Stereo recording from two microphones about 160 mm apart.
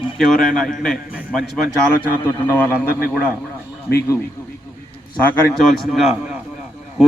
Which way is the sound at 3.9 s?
90° left.